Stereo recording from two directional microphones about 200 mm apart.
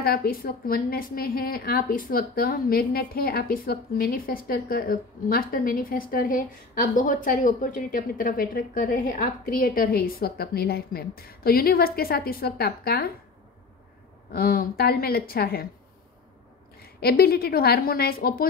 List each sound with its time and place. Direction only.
0.0 s a woman's voice: 50° left (ahead or behind)
14.3 s a woman's voice: 45° left (ahead or behind)
16.8 s a woman's voice: 50° left (ahead or behind)